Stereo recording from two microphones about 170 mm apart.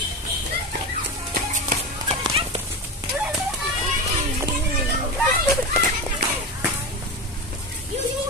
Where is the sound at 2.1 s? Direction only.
35° right (ahead or behind).